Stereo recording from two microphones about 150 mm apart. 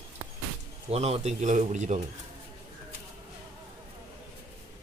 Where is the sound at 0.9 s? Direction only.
45° right (ahead or behind).